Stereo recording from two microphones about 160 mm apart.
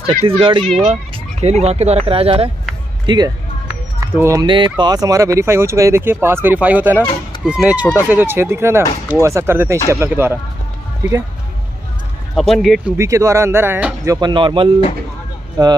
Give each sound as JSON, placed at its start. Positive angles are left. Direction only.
{"t": 0.4, "sound": "speech", "side_deg": -30}
{"t": 4.0, "sound": "speech", "side_deg": -15}
{"t": 4.5, "sound": "speech", "side_deg": -30}
{"t": 12.4, "sound": "speech", "side_deg": 0}
{"t": 12.9, "sound": "speech", "side_deg": -20}
{"t": 14.3, "sound": "speech", "side_deg": -30}